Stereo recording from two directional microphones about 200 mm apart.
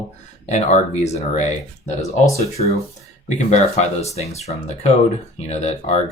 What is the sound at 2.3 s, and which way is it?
Speech, 30° left (ahead or behind).